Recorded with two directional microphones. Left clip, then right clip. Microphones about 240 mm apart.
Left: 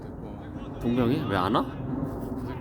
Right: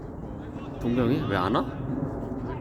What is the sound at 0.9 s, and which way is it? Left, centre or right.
Speech, centre.